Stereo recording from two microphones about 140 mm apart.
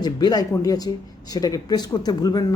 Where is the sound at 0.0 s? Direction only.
30° left (ahead or behind).